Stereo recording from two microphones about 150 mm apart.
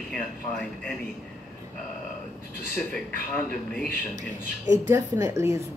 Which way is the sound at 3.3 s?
10° left (ahead or behind).